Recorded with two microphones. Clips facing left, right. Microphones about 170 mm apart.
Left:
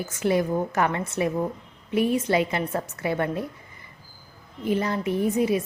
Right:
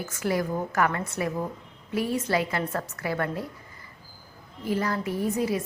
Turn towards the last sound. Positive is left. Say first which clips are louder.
# left 4 dB
turn(degrees=20)  # may be behind; listen again after turning